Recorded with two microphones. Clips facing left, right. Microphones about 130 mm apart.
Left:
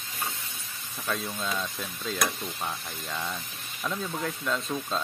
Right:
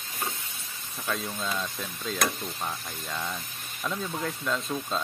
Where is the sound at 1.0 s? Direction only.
Centre (ahead or behind).